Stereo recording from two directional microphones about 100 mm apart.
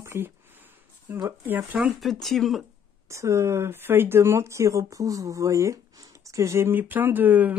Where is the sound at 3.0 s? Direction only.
30° right (ahead or behind).